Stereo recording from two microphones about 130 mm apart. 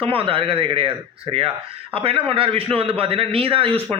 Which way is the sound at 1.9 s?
45° right (ahead or behind).